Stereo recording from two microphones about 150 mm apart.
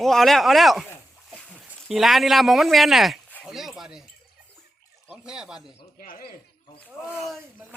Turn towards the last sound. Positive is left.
turn(degrees=65)  # may be behind; listen again after turning